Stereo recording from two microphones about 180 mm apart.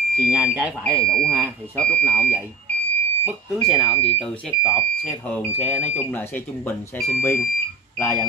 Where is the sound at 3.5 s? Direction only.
Centre (ahead or behind).